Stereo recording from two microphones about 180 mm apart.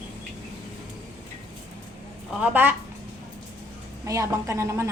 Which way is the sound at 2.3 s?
10° right (ahead or behind).